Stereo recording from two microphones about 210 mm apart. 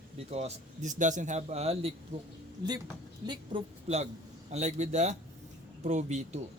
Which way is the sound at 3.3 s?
25° right (ahead or behind).